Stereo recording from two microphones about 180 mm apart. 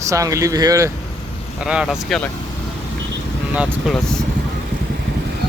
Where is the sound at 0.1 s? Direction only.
20° right (ahead or behind).